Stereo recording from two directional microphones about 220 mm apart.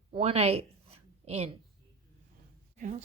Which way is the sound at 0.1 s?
25° right (ahead or behind).